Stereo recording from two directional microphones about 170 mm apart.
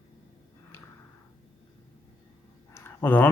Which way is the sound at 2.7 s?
15° left (ahead or behind).